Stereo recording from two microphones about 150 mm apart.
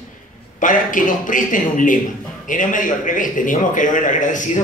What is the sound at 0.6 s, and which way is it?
A man's voice, 60° left (ahead or behind).